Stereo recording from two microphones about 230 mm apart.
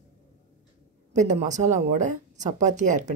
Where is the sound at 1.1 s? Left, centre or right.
Right.